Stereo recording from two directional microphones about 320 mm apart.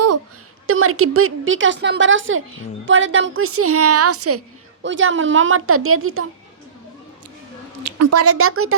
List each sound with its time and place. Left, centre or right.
0.7 s a woman's voice: right
7.9 s speech: right